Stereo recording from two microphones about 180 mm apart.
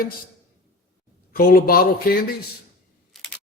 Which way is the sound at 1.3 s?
55° left (ahead or behind).